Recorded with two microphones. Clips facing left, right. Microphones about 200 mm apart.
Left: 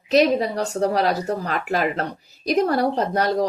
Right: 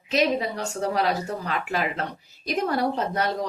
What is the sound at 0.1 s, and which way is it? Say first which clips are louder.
A woman's voice: left 6 dB; 40° left (ahead or behind).